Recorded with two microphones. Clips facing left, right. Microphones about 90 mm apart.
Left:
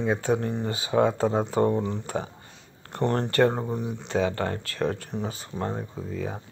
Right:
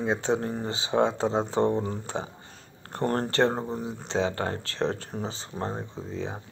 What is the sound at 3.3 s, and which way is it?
Speech, 30° right (ahead or behind).